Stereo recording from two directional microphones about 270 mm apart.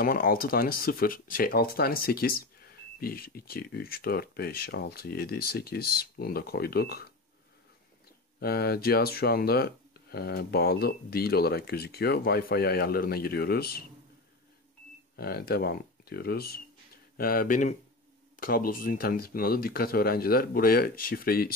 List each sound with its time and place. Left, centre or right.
0.0 s speech: left
8.4 s speech: left
15.1 s speech: left